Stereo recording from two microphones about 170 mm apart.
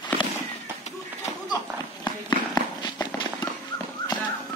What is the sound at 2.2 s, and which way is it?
Run, 25° left (ahead or behind).